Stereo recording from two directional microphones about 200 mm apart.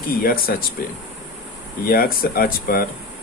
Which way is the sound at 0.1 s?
45° left (ahead or behind).